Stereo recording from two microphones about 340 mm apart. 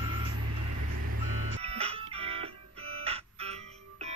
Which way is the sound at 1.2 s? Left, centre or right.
Right.